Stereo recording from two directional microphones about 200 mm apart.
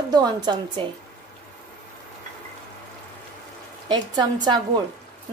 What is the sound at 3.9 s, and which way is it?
Speech, 20° right (ahead or behind).